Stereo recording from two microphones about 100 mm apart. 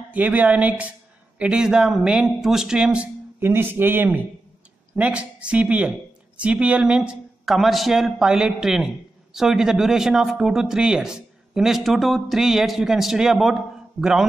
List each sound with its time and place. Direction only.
0.1 s a man's voice: 15° right (ahead or behind)
3.3 s a man's voice: 20° right (ahead or behind); by 13.6 s centre (ahead or behind)